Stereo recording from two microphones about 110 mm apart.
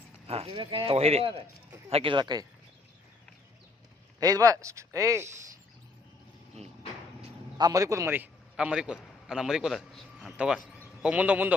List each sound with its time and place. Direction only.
0.3 s speech: 60° right (ahead or behind)
2.1 s speech: 40° right (ahead or behind)
4.2 s speech: 35° right (ahead or behind)
7.6 s speech: 30° right (ahead or behind)
8.5 s a man's voice: 10° right (ahead or behind)